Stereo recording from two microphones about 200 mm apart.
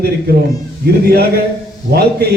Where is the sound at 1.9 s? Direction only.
50° right (ahead or behind).